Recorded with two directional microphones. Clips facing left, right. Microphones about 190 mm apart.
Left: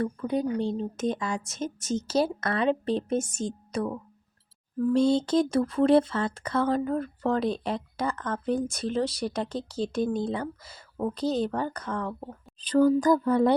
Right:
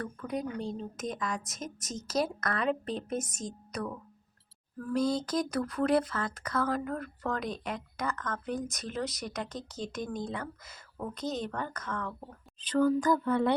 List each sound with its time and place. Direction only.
0.0 s speech: 30° left (ahead or behind)